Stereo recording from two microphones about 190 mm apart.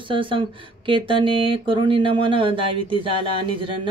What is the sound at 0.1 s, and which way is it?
Speech, 25° right (ahead or behind).